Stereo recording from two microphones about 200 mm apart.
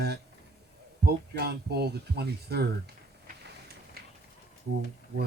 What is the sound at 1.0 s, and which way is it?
Speech, 55° right (ahead or behind).